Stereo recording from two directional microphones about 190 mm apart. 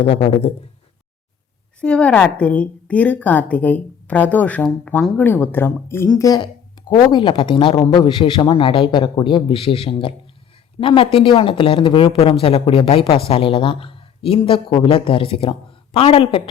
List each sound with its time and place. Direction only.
0.1 s speech: 30° left (ahead or behind)
1.8 s a woman's voice: 5° left (ahead or behind); by 16.4 s 30° left (ahead or behind)